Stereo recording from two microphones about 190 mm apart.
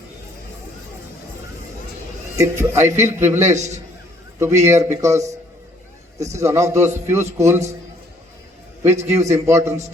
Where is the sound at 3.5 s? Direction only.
40° right (ahead or behind).